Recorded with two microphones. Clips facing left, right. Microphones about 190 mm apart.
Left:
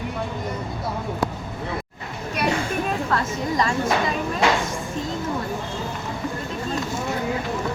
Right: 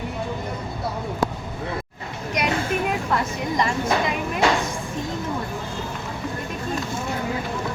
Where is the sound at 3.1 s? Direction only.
15° right (ahead or behind).